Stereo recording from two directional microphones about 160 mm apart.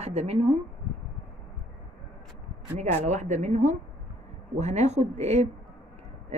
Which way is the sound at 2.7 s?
45° right (ahead or behind).